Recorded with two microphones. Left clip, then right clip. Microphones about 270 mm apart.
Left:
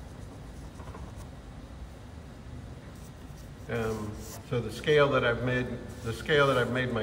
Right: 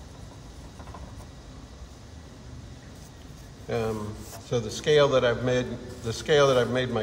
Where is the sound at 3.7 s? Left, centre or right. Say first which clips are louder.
Right 4 dB; centre.